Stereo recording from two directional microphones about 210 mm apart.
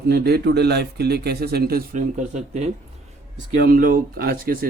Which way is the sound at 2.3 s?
35° right (ahead or behind).